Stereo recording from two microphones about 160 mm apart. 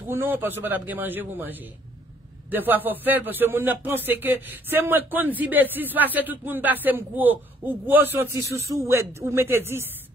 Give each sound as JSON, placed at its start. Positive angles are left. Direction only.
{"t": 0.1, "sound": "a man's voice", "side_deg": -15}